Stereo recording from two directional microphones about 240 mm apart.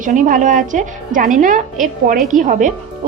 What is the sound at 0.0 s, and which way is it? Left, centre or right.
A woman's voice, right.